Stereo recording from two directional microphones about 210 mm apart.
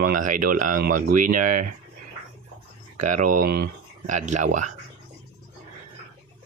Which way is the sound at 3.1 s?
35° right (ahead or behind).